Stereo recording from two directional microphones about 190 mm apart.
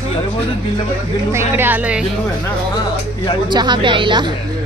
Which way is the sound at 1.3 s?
10° right (ahead or behind).